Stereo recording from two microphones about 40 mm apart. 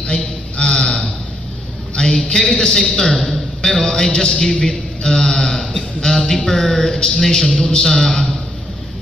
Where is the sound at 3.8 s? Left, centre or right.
Centre.